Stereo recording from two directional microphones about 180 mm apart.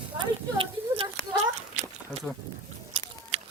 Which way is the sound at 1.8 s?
40° right (ahead or behind).